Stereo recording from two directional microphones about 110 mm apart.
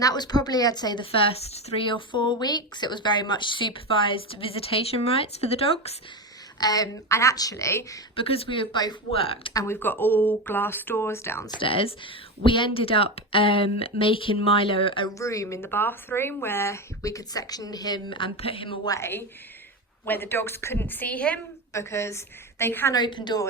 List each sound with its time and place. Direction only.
0.0 s a woman's voice: 35° left (ahead or behind)
1.2 s speech: 70° left (ahead or behind)
1.9 s a woman's voice: 45° left (ahead or behind); by 6.0 s 65° left (ahead or behind)
6.6 s a woman's voice: 35° left (ahead or behind)
8.1 s a woman's voice: 60° left (ahead or behind); by 9.0 s 40° left (ahead or behind)
9.1 s speech: 60° left (ahead or behind)
9.5 s a woman's voice: 30° left (ahead or behind)
9.7 s speech: 15° left (ahead or behind)
11.6 s a woman's voice: 55° left (ahead or behind)
15.2 s speech: 30° left (ahead or behind); by 18.8 s 55° left (ahead or behind)
18.9 s a woman's voice: 25° left (ahead or behind)
21.7 s speech: 25° left (ahead or behind)
23.0 s a woman's voice: 40° left (ahead or behind)